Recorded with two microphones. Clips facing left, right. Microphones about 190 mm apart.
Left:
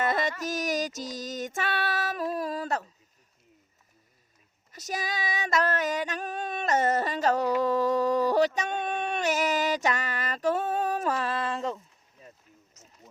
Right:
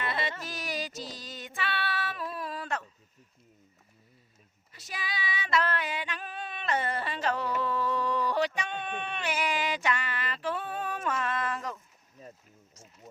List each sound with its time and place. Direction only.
0.0 s music: 45° left (ahead or behind)
4.7 s female singing: 45° left (ahead or behind); by 11.8 s 25° left (ahead or behind)